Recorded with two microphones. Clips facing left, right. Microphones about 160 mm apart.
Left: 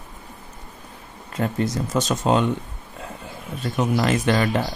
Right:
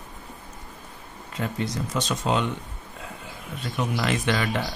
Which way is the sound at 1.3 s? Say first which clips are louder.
Left 5 dB; 45° left (ahead or behind).